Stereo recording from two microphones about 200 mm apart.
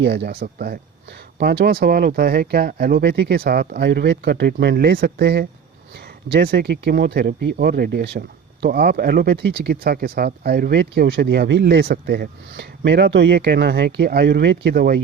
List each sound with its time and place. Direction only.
0.0 s speech: 55° right (ahead or behind)